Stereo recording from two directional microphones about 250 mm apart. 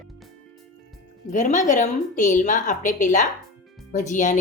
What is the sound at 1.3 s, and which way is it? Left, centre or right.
A woman's voice, left.